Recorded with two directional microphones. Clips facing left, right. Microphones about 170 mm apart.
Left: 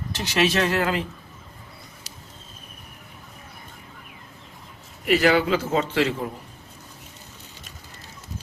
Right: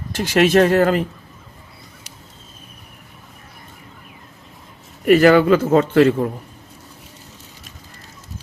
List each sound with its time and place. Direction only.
0.1 s a man's voice: 50° right (ahead or behind)
5.0 s a man's voice: 50° right (ahead or behind)